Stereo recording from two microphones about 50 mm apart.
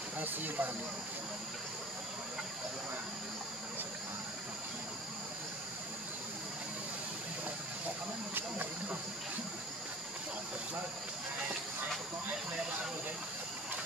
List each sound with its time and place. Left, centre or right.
0.2 s speech: right